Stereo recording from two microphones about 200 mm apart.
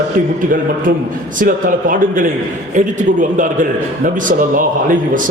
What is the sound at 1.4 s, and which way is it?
A man's voice, 45° right (ahead or behind).